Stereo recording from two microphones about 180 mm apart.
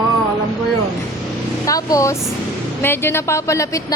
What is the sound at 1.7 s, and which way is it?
A woman's voice, 20° left (ahead or behind).